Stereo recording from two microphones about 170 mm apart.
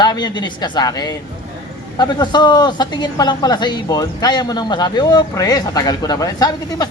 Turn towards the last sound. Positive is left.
turn(degrees=20)  # may be behind; listen again after turning